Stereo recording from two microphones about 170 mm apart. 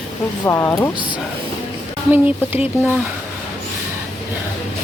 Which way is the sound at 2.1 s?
10° right (ahead or behind).